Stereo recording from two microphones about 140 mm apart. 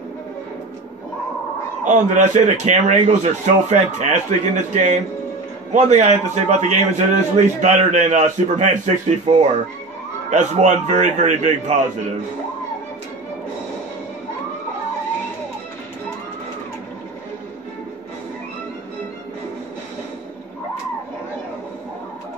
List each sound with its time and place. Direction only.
1.9 s a man's voice: 60° right (ahead or behind)